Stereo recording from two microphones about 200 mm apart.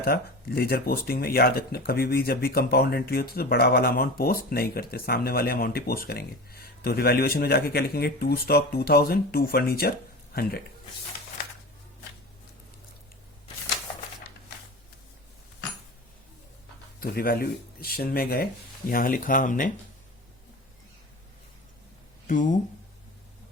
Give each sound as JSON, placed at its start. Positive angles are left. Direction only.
{"t": 0.0, "sound": "speech", "side_deg": 50}
{"t": 17.0, "sound": "speech", "side_deg": 45}
{"t": 22.3, "sound": "speech", "side_deg": 40}